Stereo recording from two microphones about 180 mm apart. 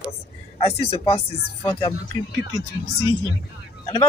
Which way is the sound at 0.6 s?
30° left (ahead or behind).